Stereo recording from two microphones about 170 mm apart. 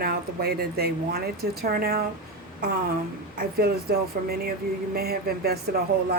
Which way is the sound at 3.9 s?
60° right (ahead or behind).